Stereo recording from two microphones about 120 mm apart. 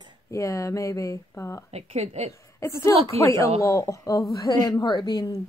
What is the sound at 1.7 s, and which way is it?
Speech, 60° right (ahead or behind).